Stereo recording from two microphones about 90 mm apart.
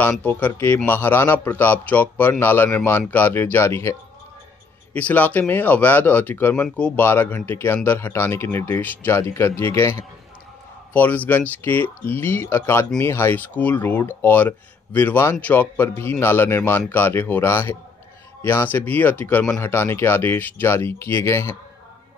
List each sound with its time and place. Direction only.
0.2 s speech: 20° left (ahead or behind)
4.9 s speech: 20° left (ahead or behind)
10.9 s speech: 20° left (ahead or behind)